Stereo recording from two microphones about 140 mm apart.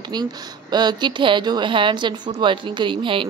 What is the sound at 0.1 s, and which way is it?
Speech, 30° right (ahead or behind).